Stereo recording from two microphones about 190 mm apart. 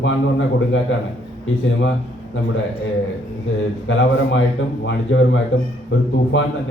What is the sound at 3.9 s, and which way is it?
A man's voice, 90° left.